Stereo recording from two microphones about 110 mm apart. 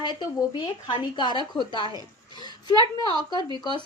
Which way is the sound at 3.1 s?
40° left (ahead or behind).